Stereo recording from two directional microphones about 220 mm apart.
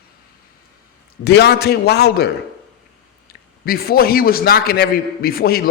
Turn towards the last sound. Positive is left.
turn(degrees=45)  # may be behind; listen again after turning